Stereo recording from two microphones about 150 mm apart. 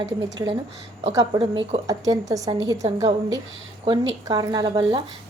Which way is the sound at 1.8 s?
25° right (ahead or behind).